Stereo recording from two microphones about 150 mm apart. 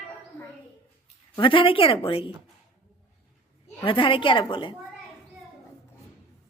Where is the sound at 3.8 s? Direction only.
35° left (ahead or behind).